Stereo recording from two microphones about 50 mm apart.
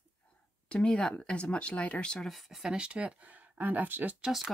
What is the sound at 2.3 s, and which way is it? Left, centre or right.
Speech, centre.